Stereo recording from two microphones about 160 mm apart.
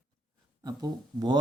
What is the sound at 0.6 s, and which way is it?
Speech, 25° right (ahead or behind).